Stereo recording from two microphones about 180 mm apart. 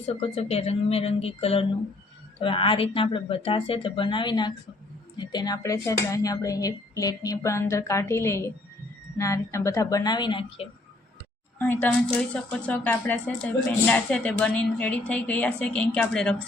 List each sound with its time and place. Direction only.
0.0 s speech: 35° left (ahead or behind)
11.6 s speech: 10° left (ahead or behind)